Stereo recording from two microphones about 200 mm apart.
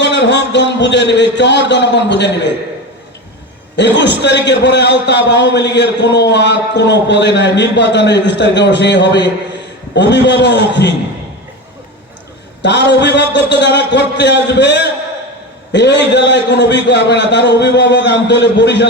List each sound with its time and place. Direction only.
0.0 s speech: 60° left (ahead or behind)
3.8 s a man's voice: 60° left (ahead or behind)
12.6 s a man's voice: 60° left (ahead or behind)